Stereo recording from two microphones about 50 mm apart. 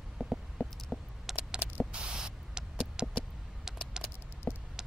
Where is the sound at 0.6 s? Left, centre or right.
Left.